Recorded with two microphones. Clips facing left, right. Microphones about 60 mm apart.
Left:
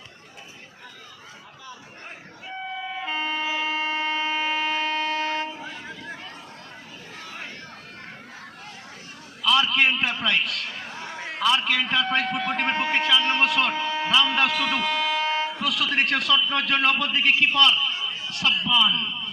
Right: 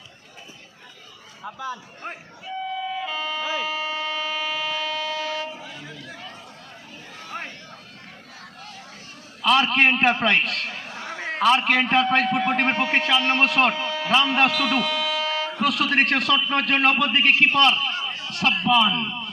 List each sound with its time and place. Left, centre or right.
1.5 s a sound: right
2.6 s emergency vehicle: left
3.6 s a sound: left
5.8 s chatter: left
9.4 s a man's voice: right
14.8 s music: left
15.5 s a man's voice: right